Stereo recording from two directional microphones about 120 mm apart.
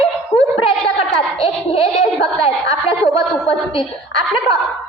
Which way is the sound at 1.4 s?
50° left (ahead or behind).